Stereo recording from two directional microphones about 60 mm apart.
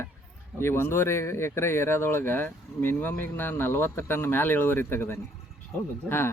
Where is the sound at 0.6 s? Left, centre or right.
Left.